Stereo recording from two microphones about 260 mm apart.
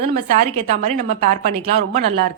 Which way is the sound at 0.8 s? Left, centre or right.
Right.